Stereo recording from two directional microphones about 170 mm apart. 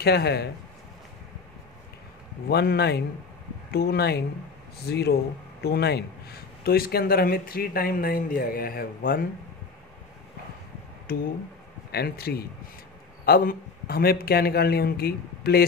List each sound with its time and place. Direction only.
0.0 s a man's voice: 75° left (ahead or behind)
2.5 s a man's voice: 70° left (ahead or behind)
11.1 s a man's voice: 60° left (ahead or behind)